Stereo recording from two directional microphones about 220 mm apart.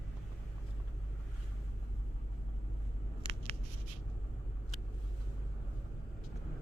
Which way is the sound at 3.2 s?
25° right (ahead or behind).